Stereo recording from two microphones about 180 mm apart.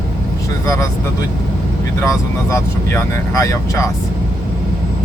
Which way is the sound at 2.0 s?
15° left (ahead or behind).